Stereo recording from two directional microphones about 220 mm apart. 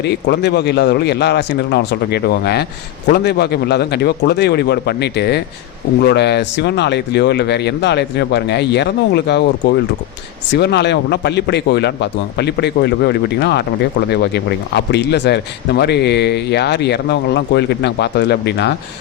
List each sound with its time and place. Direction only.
0.0 s speech: 50° left (ahead or behind)